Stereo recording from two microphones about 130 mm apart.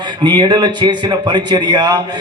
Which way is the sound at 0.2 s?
35° right (ahead or behind).